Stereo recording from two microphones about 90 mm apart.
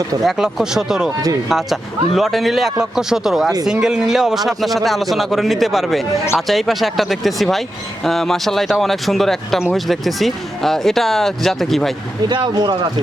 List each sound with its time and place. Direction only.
0.3 s a man's voice: 5° right (ahead or behind)
12.3 s speech: 50° right (ahead or behind)